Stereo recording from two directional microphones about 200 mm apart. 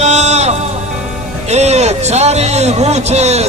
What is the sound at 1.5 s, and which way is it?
A man's voice, 35° right (ahead or behind).